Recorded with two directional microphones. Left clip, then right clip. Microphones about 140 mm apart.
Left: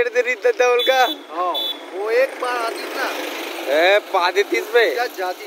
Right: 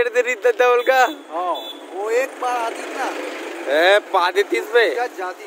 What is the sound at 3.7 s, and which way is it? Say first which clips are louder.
Speech: right 1 dB; 10° right (ahead or behind).